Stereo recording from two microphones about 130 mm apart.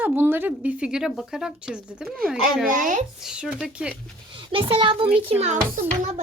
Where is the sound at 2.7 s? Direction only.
85° right.